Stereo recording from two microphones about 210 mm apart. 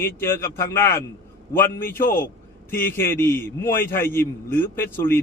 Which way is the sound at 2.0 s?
45° left (ahead or behind).